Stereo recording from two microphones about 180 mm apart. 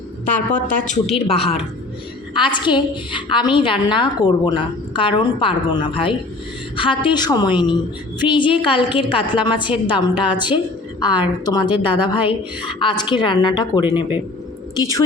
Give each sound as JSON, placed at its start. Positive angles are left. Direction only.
{"t": 0.3, "sound": "a woman's voice", "side_deg": 45}
{"t": 1.3, "sound": "a woman's voice", "side_deg": 35}